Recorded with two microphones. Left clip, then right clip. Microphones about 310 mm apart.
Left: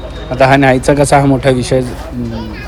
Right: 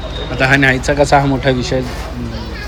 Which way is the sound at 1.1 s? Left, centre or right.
Left.